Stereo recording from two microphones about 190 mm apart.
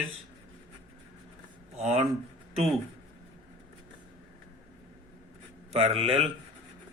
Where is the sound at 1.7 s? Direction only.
35° right (ahead or behind).